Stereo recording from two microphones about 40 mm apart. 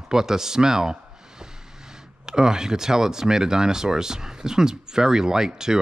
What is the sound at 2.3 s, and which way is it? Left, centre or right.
Speech, centre.